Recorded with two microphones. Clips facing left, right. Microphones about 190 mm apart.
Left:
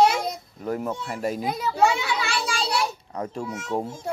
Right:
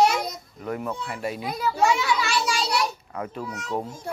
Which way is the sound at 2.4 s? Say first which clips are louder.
Right 1 dB; 30° left (ahead or behind).